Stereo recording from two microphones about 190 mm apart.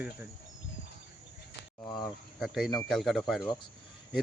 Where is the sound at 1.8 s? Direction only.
20° left (ahead or behind).